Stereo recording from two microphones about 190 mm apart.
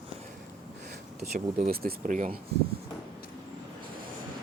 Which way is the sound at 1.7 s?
50° right (ahead or behind).